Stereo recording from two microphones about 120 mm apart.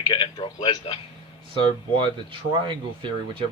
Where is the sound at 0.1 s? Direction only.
40° left (ahead or behind).